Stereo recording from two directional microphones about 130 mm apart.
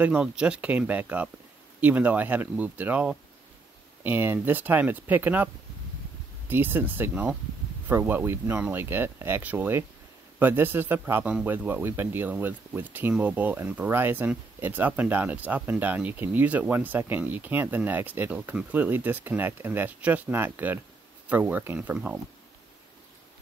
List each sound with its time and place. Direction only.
0.0 s speech: 10° right (ahead or behind)
6.5 s speech: 15° right (ahead or behind)